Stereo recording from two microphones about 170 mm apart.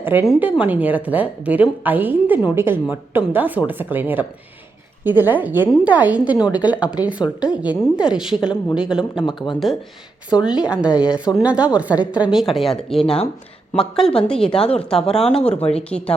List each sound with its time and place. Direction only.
0.0 s a woman's voice: 10° right (ahead or behind)
9.2 s speech: 25° left (ahead or behind)
10.4 s a woman's voice: 5° right (ahead or behind)